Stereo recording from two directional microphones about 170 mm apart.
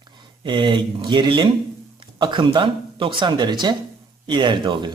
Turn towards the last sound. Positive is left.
turn(degrees=-25)  # may be behind; listen again after turning